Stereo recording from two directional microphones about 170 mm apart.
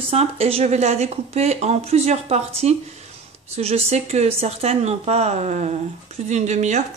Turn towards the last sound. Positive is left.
turn(degrees=-45)  # may be behind; listen again after turning